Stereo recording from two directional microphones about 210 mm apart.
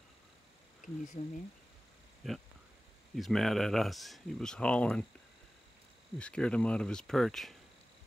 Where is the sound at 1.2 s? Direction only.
30° left (ahead or behind).